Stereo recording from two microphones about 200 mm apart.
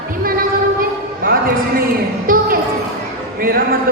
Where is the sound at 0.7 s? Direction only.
45° right (ahead or behind).